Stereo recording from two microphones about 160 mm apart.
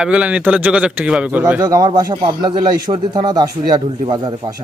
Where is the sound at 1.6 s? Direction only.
25° right (ahead or behind).